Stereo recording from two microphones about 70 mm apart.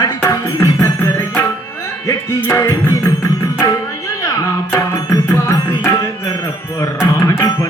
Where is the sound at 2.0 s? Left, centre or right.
Left.